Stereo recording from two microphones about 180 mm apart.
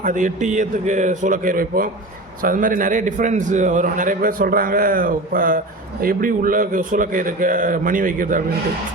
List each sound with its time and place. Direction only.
0.0 s a man's voice: 45° right (ahead or behind)